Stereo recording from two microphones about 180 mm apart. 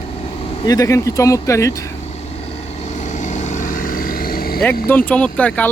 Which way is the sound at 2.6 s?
40° left (ahead or behind).